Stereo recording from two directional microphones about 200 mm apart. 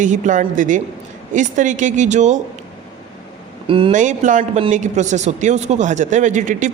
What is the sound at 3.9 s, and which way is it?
Speech, 40° right (ahead or behind).